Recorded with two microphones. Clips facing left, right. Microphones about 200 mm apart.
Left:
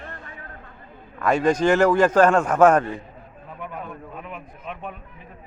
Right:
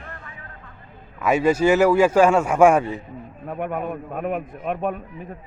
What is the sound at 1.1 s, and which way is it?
A man's voice, 5° right (ahead or behind).